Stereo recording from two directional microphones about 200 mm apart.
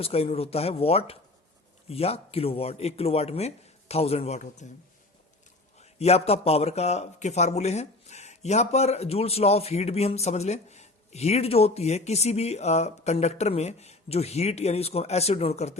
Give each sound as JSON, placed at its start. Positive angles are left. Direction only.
{"t": 0.0, "sound": "speech", "side_deg": 30}
{"t": 5.8, "sound": "speech", "side_deg": 30}